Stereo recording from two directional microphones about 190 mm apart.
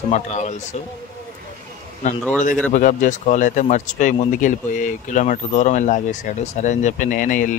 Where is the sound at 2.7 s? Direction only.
40° left (ahead or behind).